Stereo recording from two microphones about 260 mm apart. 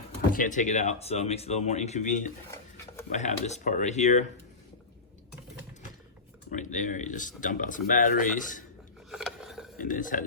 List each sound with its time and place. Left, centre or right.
0.3 s speech: left
6.5 s speech: left
9.0 s a sound: centre
9.7 s speech: left